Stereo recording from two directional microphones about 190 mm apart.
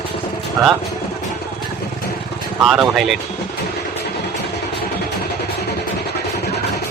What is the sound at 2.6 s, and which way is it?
Speech, centre (ahead or behind).